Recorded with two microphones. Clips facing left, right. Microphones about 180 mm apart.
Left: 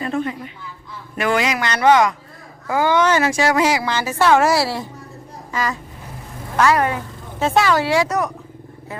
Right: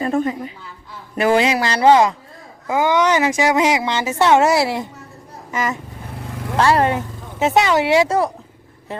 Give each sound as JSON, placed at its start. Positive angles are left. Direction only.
{"t": 0.0, "sound": "a woman's voice", "side_deg": -45}